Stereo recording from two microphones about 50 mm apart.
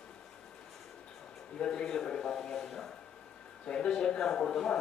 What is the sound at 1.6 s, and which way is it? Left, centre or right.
Speech, centre.